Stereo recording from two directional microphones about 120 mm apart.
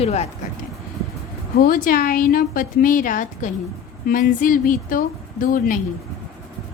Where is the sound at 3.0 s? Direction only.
90° left.